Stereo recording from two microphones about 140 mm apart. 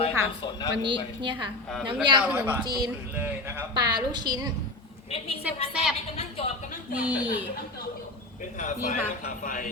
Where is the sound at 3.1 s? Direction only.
10° right (ahead or behind).